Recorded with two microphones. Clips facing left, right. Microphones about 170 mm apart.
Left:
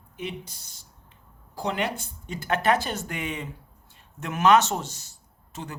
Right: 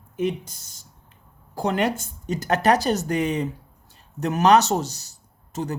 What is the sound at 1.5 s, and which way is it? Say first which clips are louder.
Speech: right 5 dB; 45° right (ahead or behind).